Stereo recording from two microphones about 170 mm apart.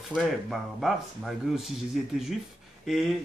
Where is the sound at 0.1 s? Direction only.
Centre (ahead or behind).